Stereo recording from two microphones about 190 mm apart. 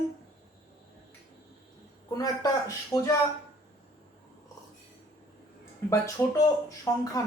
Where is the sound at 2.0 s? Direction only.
20° left (ahead or behind).